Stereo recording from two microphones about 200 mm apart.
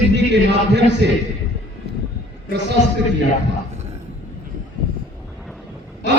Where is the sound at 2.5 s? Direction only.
60° right (ahead or behind).